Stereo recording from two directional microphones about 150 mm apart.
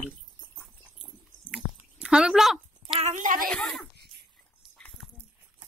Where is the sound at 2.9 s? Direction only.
50° right (ahead or behind).